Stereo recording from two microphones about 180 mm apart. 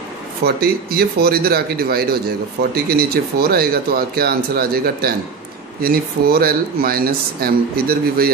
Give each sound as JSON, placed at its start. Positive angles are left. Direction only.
{"t": 0.5, "sound": "speech", "side_deg": -60}